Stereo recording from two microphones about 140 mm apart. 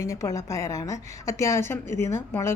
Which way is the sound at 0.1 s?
20° left (ahead or behind).